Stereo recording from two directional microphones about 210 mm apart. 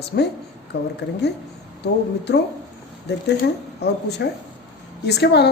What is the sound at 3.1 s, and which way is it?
A woman's voice, 55° left (ahead or behind).